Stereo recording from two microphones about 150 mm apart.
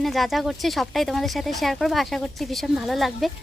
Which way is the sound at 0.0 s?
Centre (ahead or behind).